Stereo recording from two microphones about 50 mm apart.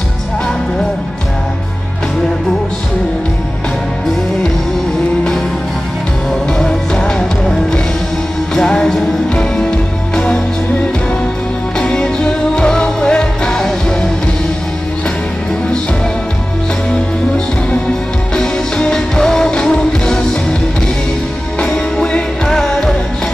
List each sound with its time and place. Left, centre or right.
6.6 s music: centre
11.8 s music: centre
18.3 s music: centre
21.5 s music: centre